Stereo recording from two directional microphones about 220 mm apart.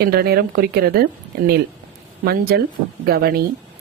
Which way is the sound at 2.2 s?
45° right (ahead or behind).